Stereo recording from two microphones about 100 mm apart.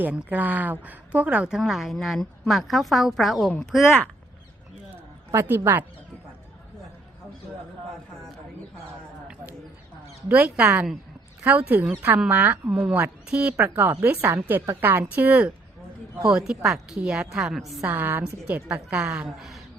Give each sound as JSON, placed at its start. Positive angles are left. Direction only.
{"t": 0.0, "sound": "a woman's voice", "side_deg": -15}
{"t": 5.3, "sound": "speech", "side_deg": -25}
{"t": 10.2, "sound": "a woman's voice", "side_deg": -15}
{"t": 13.5, "sound": "speech", "side_deg": -30}
{"t": 16.2, "sound": "a woman's voice", "side_deg": -5}
{"t": 17.8, "sound": "a woman's voice", "side_deg": -20}